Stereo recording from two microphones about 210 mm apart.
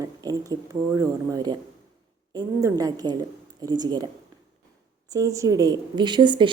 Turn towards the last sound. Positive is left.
turn(degrees=-20)  # may be behind; listen again after turning